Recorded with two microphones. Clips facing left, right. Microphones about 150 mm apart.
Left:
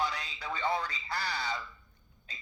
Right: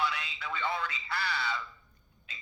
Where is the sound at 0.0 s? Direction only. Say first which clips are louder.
Right 1 dB; 35° left (ahead or behind).